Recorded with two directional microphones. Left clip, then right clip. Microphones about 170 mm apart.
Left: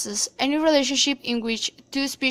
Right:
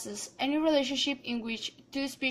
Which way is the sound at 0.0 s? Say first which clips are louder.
Left 9 dB; 30° left (ahead or behind).